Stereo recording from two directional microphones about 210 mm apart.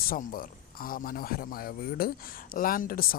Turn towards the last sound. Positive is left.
turn(degrees=45)  # may be behind; listen again after turning